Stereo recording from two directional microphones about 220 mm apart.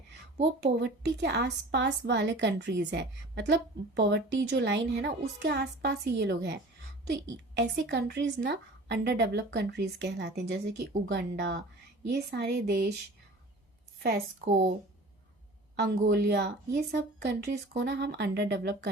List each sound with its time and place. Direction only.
0.6 s a woman's voice: 50° right (ahead or behind)
15.7 s a woman's voice: 45° right (ahead or behind)